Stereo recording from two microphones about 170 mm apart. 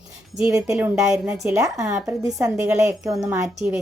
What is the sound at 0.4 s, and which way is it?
A woman's voice, 20° right (ahead or behind).